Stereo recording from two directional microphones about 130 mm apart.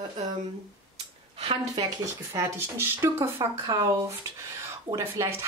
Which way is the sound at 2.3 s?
20° right (ahead or behind).